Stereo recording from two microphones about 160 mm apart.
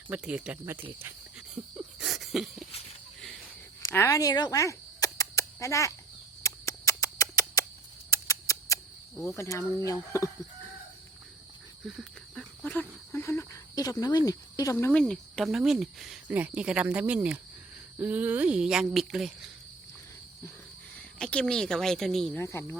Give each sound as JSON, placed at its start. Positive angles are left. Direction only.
{"t": 0.1, "sound": "speech", "side_deg": -5}
{"t": 2.0, "sound": "a sound", "side_deg": 0}
{"t": 3.9, "sound": "speech", "side_deg": 20}
{"t": 6.4, "sound": "rodents", "side_deg": 20}
{"t": 8.1, "sound": "mouse", "side_deg": 20}
{"t": 9.3, "sound": "speech", "side_deg": 20}
{"t": 11.9, "sound": "cricket", "side_deg": 0}
{"t": 14.3, "sound": "speech", "side_deg": 20}
{"t": 21.2, "sound": "speech", "side_deg": 5}
{"t": 22.4, "sound": "speech", "side_deg": 15}